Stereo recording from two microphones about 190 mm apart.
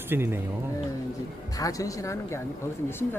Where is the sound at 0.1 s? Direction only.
10° right (ahead or behind).